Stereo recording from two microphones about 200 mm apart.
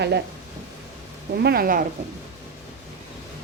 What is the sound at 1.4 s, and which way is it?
Speech, 50° right (ahead or behind).